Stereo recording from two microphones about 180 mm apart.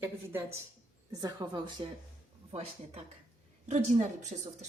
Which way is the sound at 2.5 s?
35° right (ahead or behind).